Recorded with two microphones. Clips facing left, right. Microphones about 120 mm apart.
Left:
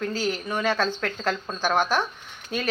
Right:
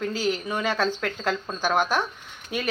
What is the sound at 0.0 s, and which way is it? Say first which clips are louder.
Speech: right 1 dB; 15° right (ahead or behind).